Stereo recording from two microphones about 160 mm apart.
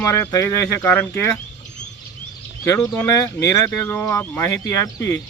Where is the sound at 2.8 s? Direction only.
20° left (ahead or behind).